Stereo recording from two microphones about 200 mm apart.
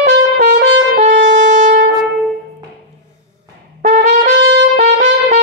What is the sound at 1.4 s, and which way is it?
Shofar, 35° right (ahead or behind).